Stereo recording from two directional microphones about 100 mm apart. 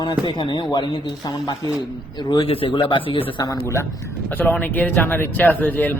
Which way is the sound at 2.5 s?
60° left (ahead or behind).